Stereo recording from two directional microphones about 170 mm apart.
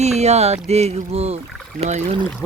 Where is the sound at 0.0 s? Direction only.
40° right (ahead or behind).